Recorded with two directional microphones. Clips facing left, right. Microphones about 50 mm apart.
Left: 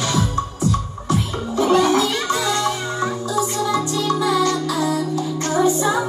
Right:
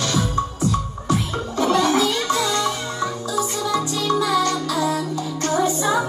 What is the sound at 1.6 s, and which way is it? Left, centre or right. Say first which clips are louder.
Music: left 3 dB; left.